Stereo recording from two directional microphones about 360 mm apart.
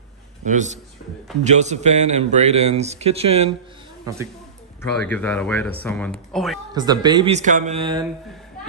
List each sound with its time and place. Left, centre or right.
0.5 s a man's voice: centre
4.9 s speech: centre
6.7 s a man's voice: centre